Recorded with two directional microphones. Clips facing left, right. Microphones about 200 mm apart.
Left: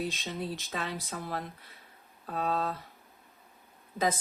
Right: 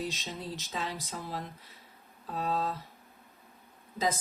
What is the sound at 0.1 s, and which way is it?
Speech, 55° left (ahead or behind).